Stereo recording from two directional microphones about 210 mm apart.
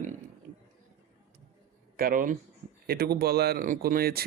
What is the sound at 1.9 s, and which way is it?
A man's voice, 45° right (ahead or behind).